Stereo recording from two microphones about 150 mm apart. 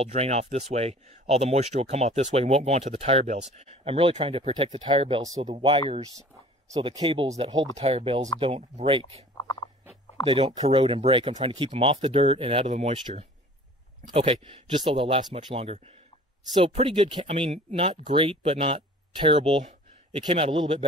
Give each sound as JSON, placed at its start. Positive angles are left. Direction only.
{"t": 0.0, "sound": "speech", "side_deg": -45}
{"t": 10.2, "sound": "speech", "side_deg": -35}
{"t": 14.0, "sound": "speech", "side_deg": -35}